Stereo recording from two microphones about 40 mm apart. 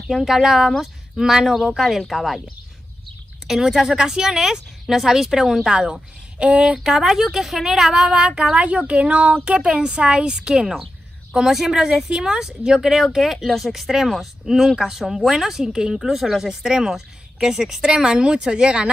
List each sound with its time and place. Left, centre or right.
0.1 s speech: centre
3.4 s speech: centre
5.7 s speech: centre
6.8 s speech: centre
8.5 s speech: right